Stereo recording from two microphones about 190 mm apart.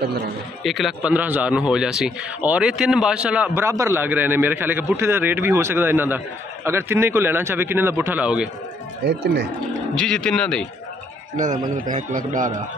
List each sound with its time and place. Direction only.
0.7 s a man's voice: centre (ahead or behind)
9.0 s speech: 60° right (ahead or behind)
9.9 s speech: 5° left (ahead or behind)
11.3 s a man's voice: 40° right (ahead or behind)